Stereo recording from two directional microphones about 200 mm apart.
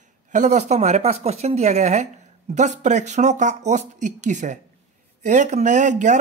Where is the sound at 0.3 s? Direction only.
35° right (ahead or behind).